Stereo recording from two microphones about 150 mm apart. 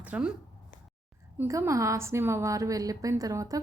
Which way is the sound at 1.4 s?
20° right (ahead or behind).